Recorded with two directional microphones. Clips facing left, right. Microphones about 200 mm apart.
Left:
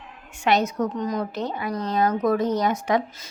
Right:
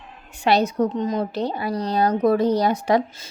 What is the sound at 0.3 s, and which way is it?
A woman's voice, 35° right (ahead or behind).